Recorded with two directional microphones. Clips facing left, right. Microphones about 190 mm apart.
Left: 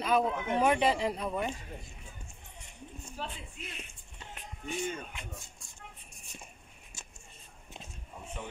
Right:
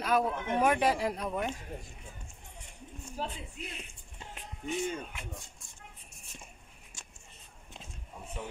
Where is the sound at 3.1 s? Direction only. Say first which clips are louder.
Right 4 dB; 40° right (ahead or behind).